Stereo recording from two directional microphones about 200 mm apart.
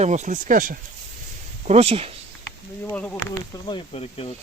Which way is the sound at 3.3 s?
20° left (ahead or behind).